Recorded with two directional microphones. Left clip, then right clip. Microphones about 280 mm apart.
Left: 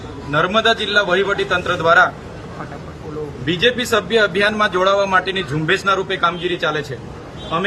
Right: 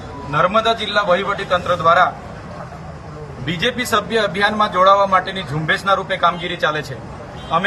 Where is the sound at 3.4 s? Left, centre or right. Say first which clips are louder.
Left 3 dB; centre.